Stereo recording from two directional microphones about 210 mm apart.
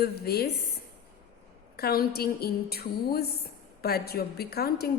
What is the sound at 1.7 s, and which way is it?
A woman's voice, 45° left (ahead or behind).